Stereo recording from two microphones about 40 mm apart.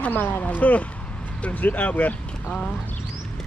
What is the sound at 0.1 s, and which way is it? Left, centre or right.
Speech, left.